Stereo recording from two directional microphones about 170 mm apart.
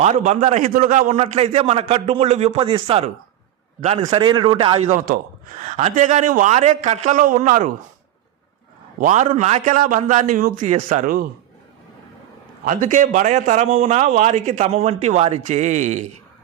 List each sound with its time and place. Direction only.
0.0 s a man's voice: 45° right (ahead or behind)
4.0 s a man's voice: 25° right (ahead or behind)
4.9 s a man's voice: 55° right (ahead or behind)
9.0 s a man's voice: 45° right (ahead or behind)
12.6 s a man's voice: 50° right (ahead or behind)